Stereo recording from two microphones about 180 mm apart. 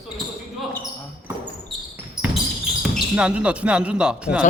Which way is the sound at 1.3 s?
15° right (ahead or behind).